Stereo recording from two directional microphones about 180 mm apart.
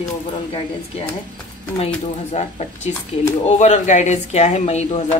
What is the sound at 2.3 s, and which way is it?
Speech, 40° left (ahead or behind).